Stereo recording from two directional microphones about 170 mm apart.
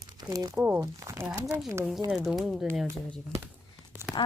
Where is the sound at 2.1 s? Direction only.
Centre (ahead or behind).